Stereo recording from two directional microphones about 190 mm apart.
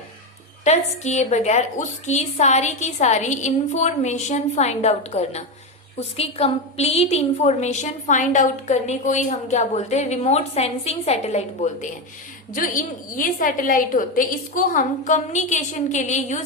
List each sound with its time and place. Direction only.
0.6 s a woman's voice: 35° left (ahead or behind)